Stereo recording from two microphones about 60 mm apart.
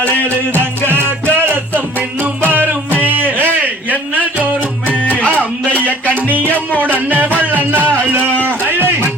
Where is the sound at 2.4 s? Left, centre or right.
Right.